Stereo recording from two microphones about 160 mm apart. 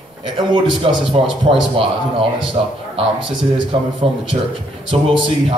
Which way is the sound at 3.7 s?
35° right (ahead or behind).